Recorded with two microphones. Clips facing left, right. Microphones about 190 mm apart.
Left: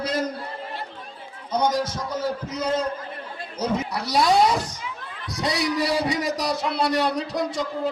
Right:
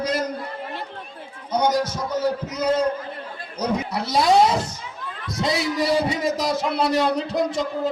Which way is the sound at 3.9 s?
25° right (ahead or behind).